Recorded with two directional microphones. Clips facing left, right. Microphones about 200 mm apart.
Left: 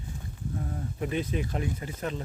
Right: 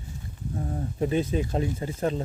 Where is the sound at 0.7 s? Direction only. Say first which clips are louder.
Right 7 dB; 30° right (ahead or behind).